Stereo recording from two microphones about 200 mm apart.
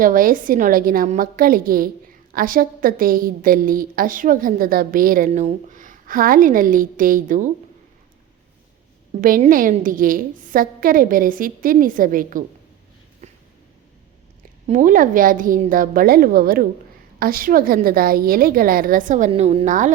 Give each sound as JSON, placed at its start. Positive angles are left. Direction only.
{"t": 0.0, "sound": "a woman's voice", "side_deg": -45}
{"t": 9.2, "sound": "a woman's voice", "side_deg": -45}
{"t": 13.2, "sound": "a sound", "side_deg": -35}
{"t": 14.7, "sound": "a woman's voice", "side_deg": -40}